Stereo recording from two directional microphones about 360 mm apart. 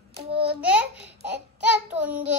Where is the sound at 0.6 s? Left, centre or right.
Centre.